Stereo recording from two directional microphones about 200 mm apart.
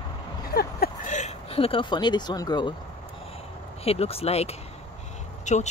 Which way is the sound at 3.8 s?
30° left (ahead or behind).